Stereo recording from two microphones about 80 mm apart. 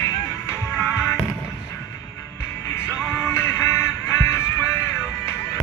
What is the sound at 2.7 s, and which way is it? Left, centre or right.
Music, left.